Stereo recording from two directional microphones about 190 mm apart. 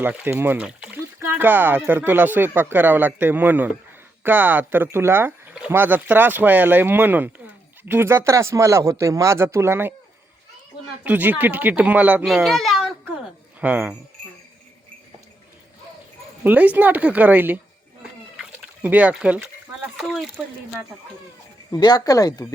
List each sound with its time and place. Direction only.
0.0 s speech: 10° right (ahead or behind)
11.0 s speech: 10° right (ahead or behind)
16.4 s speech: 10° right (ahead or behind)
18.3 s a sound: 10° right (ahead or behind)
20.0 s speech: centre (ahead or behind)
21.7 s speech: 20° left (ahead or behind)